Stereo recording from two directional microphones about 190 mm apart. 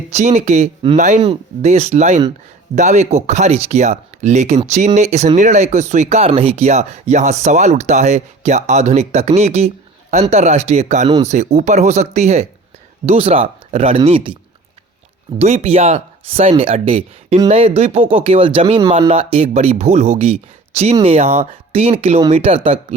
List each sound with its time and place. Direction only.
0.1 s speech: 35° right (ahead or behind)
15.4 s speech: 35° right (ahead or behind)